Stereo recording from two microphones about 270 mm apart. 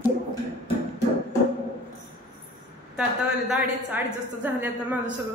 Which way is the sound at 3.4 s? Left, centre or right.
Centre.